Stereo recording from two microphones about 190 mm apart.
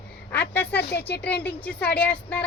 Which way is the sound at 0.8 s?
60° left (ahead or behind).